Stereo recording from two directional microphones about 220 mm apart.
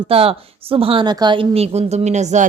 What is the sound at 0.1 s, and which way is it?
Speech, 25° right (ahead or behind).